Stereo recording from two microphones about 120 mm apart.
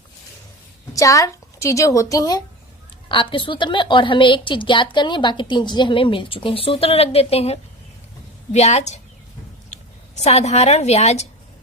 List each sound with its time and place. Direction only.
0.9 s a woman's voice: 25° left (ahead or behind)
3.1 s a woman's voice: 45° left (ahead or behind); by 9.0 s 70° left (ahead or behind)
10.2 s a woman's voice: 65° left (ahead or behind)